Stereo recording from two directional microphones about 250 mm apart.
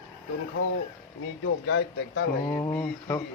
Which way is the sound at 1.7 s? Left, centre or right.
Left.